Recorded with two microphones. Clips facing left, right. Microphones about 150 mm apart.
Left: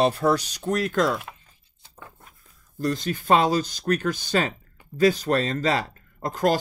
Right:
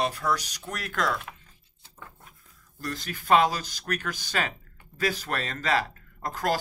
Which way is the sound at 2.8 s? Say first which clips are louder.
Left 9 dB; 25° left (ahead or behind).